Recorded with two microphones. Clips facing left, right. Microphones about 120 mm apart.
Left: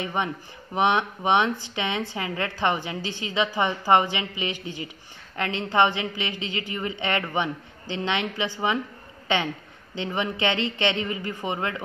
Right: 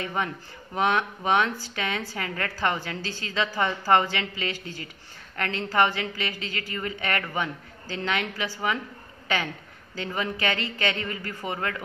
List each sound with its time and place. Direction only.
0.0 s a woman's voice: 20° left (ahead or behind)